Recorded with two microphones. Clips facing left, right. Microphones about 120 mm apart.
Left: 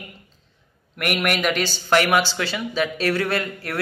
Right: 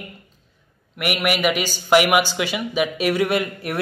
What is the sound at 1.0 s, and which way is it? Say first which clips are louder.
Speech: right 1 dB; 5° right (ahead or behind).